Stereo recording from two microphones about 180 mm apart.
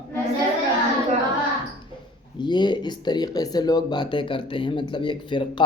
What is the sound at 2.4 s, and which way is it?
Speech, 25° left (ahead or behind).